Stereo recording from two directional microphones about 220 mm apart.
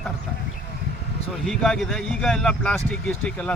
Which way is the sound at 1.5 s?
Centre (ahead or behind).